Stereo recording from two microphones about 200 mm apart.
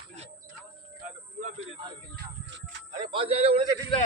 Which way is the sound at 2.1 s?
55° right (ahead or behind).